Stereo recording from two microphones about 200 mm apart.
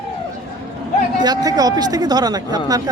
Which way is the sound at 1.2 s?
20° right (ahead or behind).